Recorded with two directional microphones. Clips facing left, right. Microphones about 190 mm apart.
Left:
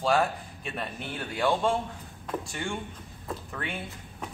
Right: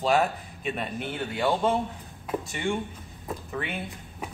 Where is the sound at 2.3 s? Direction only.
15° right (ahead or behind).